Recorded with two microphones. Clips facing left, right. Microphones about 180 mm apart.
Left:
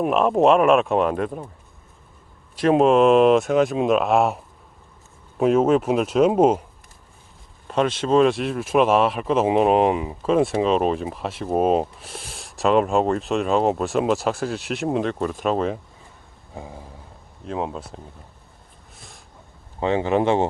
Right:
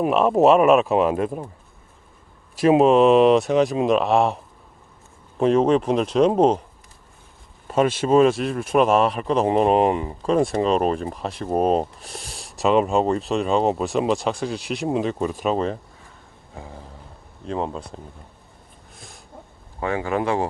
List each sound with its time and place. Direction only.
0.0 s speech: centre (ahead or behind)
2.6 s speech: 5° right (ahead or behind)
5.4 s speech: 5° left (ahead or behind)
7.7 s speech: 5° right (ahead or behind)
16.6 s a sound: 15° left (ahead or behind)
17.4 s speech: 5° left (ahead or behind)
18.9 s a sound: centre (ahead or behind)
19.8 s speech: 20° left (ahead or behind)